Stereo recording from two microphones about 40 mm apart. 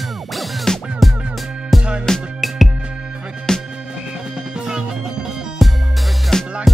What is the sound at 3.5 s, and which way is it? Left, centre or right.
Music, centre.